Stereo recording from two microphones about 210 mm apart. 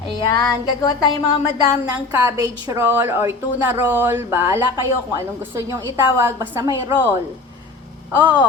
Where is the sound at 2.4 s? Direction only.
15° right (ahead or behind).